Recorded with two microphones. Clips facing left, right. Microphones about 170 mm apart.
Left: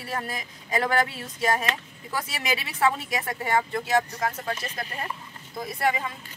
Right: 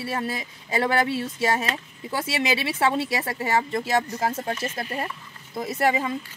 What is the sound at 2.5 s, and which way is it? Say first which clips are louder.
Speech: even; 25° right (ahead or behind).